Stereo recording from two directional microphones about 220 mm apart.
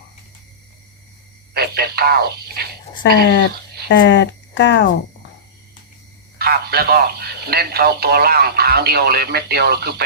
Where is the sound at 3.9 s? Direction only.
50° left (ahead or behind).